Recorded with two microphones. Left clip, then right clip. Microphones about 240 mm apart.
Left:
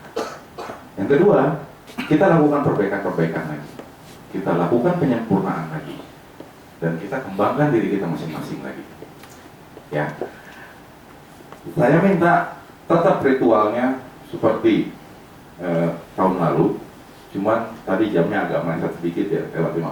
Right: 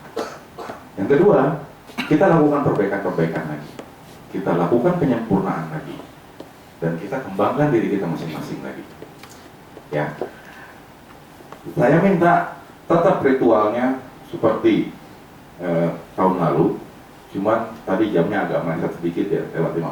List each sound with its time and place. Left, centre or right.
0.6 s dog: centre
1.0 s speech: centre
6.8 s speech: centre
9.9 s speech: centre
11.9 s speech: centre
12.2 s speech: centre